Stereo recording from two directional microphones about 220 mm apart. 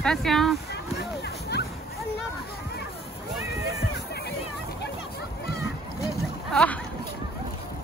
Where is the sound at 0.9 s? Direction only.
50° left (ahead or behind).